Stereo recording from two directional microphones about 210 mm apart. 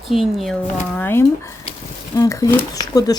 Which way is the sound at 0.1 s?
Centre (ahead or behind).